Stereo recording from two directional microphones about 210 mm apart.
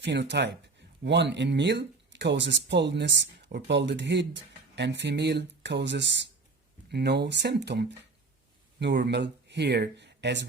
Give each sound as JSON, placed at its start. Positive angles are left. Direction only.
{"t": 0.0, "sound": "speech", "side_deg": -55}